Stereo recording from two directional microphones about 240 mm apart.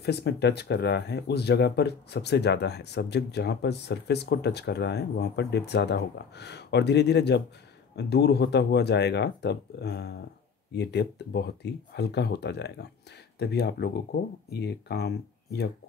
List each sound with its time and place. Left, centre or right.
0.0 s speech: left